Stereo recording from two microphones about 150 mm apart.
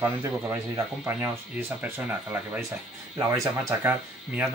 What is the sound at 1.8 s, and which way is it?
Speech, 15° right (ahead or behind).